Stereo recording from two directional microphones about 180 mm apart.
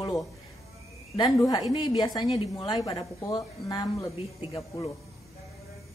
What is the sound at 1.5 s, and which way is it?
Speech, 20° left (ahead or behind).